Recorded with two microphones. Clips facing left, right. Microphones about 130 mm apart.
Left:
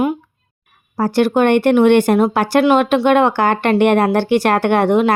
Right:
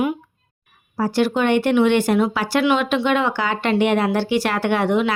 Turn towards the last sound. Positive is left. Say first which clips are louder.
# left 5 dB
turn(degrees=50)  # may be behind; listen again after turning